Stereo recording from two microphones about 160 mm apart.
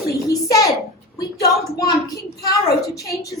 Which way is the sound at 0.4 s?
20° left (ahead or behind).